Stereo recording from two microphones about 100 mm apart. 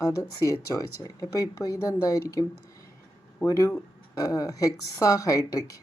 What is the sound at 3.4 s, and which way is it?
Speech, 35° left (ahead or behind).